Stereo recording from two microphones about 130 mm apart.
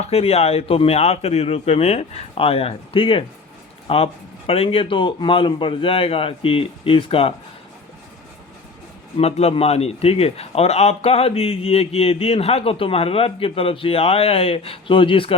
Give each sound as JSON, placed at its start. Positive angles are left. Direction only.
{"t": 0.0, "sound": "a man's voice", "side_deg": 50}
{"t": 9.1, "sound": "a man's voice", "side_deg": 50}